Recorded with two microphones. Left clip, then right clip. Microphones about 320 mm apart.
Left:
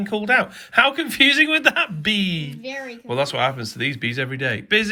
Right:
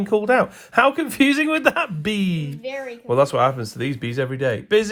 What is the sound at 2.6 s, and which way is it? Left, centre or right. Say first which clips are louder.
Speech: right 2 dB; right.